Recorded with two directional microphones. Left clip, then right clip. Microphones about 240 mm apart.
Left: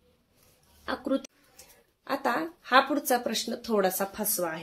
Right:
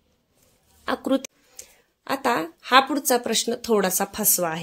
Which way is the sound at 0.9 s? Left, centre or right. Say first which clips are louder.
Right 6 dB; right.